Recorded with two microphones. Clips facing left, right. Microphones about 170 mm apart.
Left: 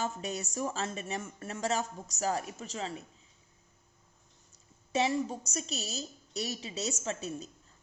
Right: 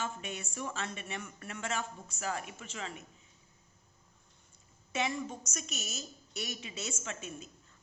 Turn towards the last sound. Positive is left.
turn(degrees=35)  # may be behind; listen again after turning